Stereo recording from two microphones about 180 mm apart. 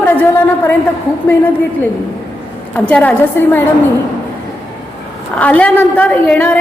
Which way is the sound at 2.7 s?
10° left (ahead or behind).